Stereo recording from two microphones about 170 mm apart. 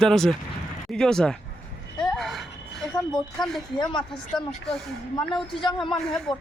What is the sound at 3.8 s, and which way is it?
Speech, 25° left (ahead or behind).